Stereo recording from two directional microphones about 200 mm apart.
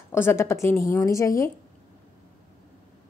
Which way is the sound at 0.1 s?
10° left (ahead or behind).